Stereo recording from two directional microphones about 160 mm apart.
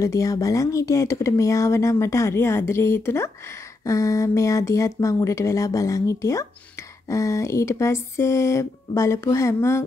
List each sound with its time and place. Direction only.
0.0 s speech: 20° left (ahead or behind)